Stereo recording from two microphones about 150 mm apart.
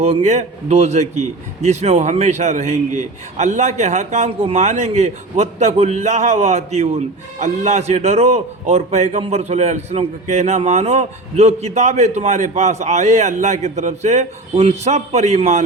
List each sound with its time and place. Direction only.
0.0 s a man's voice: 45° right (ahead or behind)